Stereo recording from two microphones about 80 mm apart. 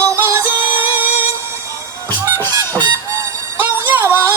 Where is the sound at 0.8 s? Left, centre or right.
Right.